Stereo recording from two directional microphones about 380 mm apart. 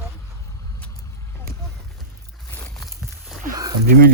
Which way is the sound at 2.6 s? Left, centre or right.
Centre.